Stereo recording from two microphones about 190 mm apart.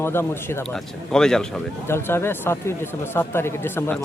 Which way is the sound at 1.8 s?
15° left (ahead or behind).